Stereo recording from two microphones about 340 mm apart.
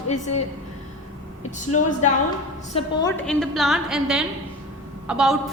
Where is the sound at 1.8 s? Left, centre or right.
Left.